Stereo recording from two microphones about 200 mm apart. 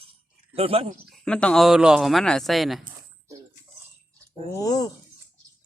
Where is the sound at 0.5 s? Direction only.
30° right (ahead or behind).